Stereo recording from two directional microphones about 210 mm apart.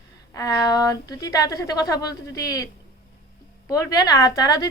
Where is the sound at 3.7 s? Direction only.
15° left (ahead or behind).